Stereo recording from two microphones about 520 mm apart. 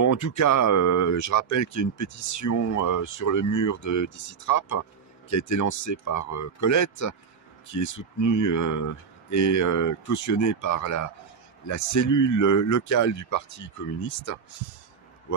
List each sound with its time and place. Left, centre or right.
0.0 s speech: left